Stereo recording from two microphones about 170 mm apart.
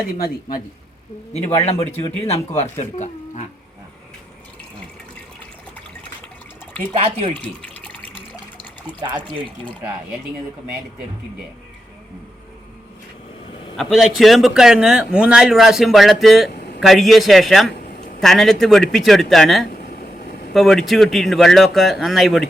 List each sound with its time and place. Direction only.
1.3 s a man's voice: 40° left (ahead or behind)
6.9 s speech: 35° right (ahead or behind)
7.3 s water: 5° left (ahead or behind)
13.7 s speech: centre (ahead or behind)
19.9 s vehicle: 55° left (ahead or behind)
20.5 s speech: centre (ahead or behind)